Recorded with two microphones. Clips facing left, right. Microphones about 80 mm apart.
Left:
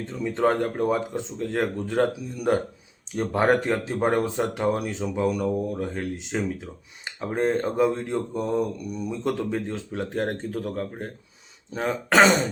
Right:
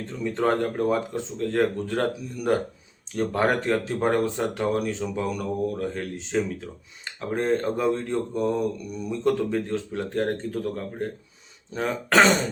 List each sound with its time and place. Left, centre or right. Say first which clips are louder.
0.3 s speech: left 1 dB; centre